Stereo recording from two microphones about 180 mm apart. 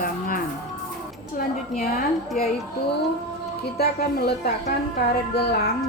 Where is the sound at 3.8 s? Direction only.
60° left (ahead or behind).